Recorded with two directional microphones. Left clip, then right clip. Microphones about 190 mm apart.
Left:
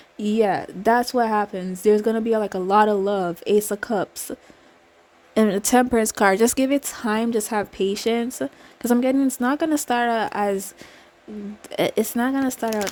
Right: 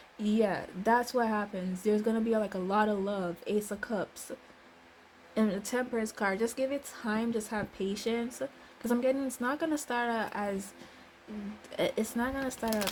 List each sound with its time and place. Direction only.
0.2 s a woman's voice: 50° left (ahead or behind)